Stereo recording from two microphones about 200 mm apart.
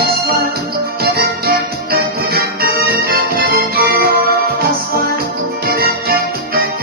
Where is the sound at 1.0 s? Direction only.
50° right (ahead or behind).